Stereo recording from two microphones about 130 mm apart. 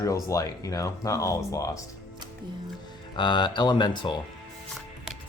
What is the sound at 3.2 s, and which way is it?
Speech, 35° left (ahead or behind).